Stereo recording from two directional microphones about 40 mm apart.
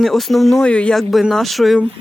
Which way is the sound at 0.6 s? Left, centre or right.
Left.